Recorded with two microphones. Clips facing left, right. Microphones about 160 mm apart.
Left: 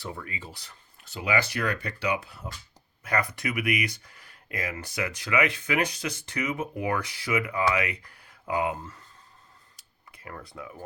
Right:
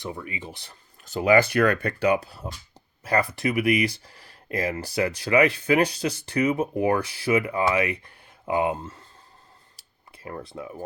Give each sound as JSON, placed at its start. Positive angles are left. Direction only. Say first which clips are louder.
{"t": 0.0, "sound": "speech", "louder": "right 4 dB", "side_deg": -20}
{"t": 1.0, "sound": "speech", "louder": "right 9 dB", "side_deg": -45}
{"t": 9.7, "sound": "a sound", "louder": "right 2 dB", "side_deg": -30}